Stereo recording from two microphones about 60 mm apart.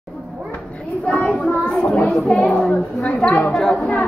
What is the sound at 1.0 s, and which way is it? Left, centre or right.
Child singing, centre.